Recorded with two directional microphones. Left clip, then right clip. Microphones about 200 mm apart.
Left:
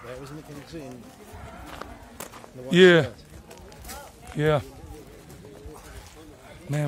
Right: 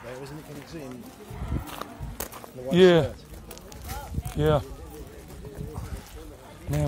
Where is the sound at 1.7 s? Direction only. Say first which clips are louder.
Right 2 dB; 55° right (ahead or behind).